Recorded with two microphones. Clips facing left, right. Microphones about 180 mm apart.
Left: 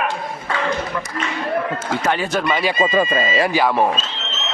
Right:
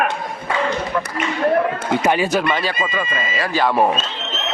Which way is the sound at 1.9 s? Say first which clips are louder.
Right 3 dB; 15° right (ahead or behind).